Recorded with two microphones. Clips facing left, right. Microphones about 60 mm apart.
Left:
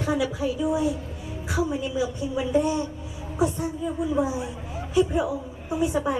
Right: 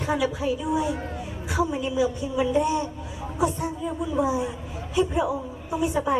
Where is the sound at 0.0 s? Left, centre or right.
Right.